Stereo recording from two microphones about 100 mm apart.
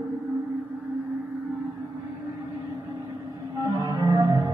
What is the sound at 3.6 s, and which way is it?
Music, 35° right (ahead or behind).